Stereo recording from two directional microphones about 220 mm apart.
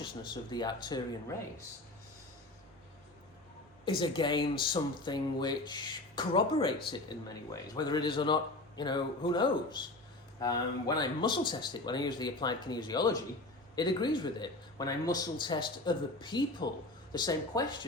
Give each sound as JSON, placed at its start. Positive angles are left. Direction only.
{"t": 0.0, "sound": "speech", "side_deg": 20}
{"t": 3.8, "sound": "speech", "side_deg": 20}